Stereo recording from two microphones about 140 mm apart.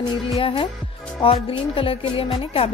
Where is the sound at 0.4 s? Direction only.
40° left (ahead or behind).